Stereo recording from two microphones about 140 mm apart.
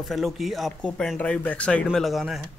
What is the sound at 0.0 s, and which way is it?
Speech, centre (ahead or behind).